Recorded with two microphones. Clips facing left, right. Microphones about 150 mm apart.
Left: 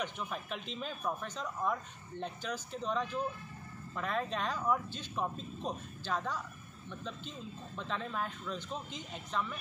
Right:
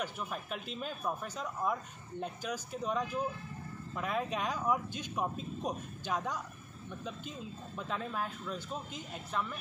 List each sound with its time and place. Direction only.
0.0 s speech: 5° right (ahead or behind)